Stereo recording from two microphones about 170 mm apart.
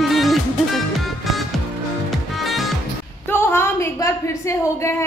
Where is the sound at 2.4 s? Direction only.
Centre (ahead or behind).